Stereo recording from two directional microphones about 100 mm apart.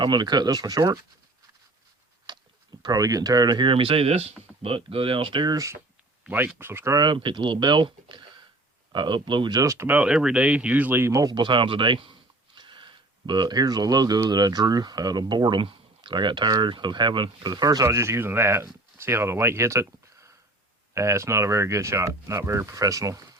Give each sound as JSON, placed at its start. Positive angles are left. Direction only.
{"t": 0.0, "sound": "speech", "side_deg": -45}
{"t": 2.3, "sound": "a sound", "side_deg": -45}
{"t": 2.8, "sound": "speech", "side_deg": -35}
{"t": 6.2, "sound": "speech", "side_deg": -20}
{"t": 6.9, "sound": "speech", "side_deg": -50}
{"t": 9.6, "sound": "speech", "side_deg": -30}
{"t": 9.8, "sound": "speech", "side_deg": -15}
{"t": 11.1, "sound": "speech", "side_deg": -35}
{"t": 11.3, "sound": "speech", "side_deg": -55}
{"t": 17.8, "sound": "speech", "side_deg": -25}